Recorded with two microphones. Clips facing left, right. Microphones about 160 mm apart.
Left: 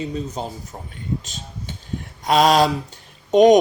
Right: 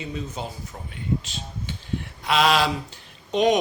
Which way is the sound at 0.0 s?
40° left (ahead or behind).